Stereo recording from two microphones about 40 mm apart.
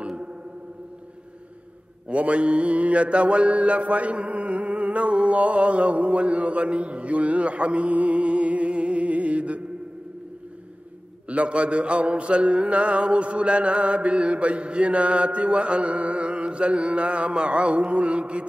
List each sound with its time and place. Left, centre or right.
0.0 s a sound: right
2.0 s mantra: right
11.2 s mantra: right